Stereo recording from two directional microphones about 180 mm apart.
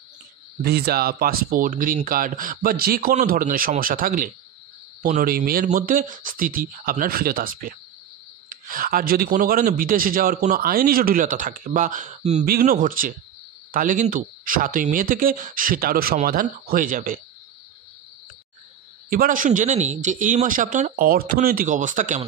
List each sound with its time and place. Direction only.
0.6 s a man's voice: 60° right (ahead or behind); by 12.4 s 40° right (ahead or behind)
12.4 s a man's voice: 50° right (ahead or behind)
19.0 s a man's voice: 50° right (ahead or behind)